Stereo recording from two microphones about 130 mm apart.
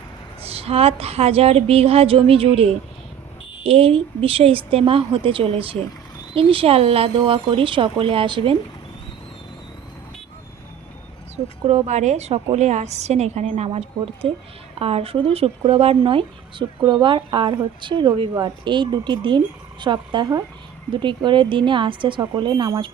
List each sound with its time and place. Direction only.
0.4 s speech: 50° right (ahead or behind)
11.6 s a woman's voice: 60° right (ahead or behind)
13.7 s speech: 50° right (ahead or behind)